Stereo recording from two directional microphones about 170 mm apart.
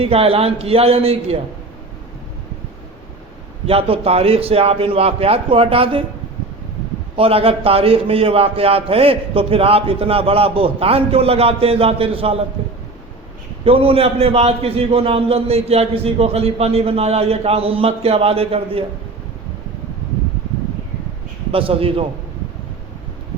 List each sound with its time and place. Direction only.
0.0 s a man's voice: 35° right (ahead or behind)
3.7 s a man's voice: 35° right (ahead or behind)
7.2 s a man's voice: 35° right (ahead or behind)
12.6 s a sound: 35° right (ahead or behind)
13.7 s a man's voice: 35° right (ahead or behind)
21.5 s a man's voice: 35° right (ahead or behind)